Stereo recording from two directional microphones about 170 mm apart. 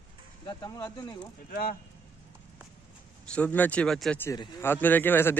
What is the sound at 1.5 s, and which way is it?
Speech, 60° left (ahead or behind).